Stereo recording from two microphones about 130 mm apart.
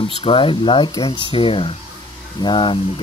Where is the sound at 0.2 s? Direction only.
40° left (ahead or behind).